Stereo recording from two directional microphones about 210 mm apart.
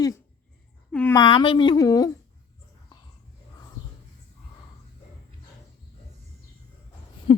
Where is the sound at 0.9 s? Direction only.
5° left (ahead or behind).